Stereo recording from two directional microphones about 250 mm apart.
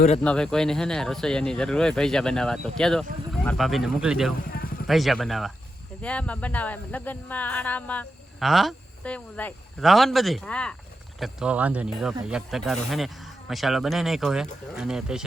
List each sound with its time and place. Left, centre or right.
0.2 s speech: centre
4.5 s vehicle: left
4.9 s speech: centre